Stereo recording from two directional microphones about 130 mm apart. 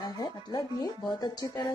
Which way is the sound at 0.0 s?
35° left (ahead or behind).